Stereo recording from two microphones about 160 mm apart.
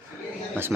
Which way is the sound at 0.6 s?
15° right (ahead or behind).